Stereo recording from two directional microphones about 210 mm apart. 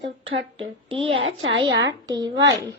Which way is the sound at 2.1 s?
20° right (ahead or behind).